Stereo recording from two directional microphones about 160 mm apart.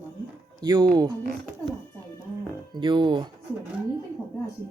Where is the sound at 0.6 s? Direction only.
25° right (ahead or behind).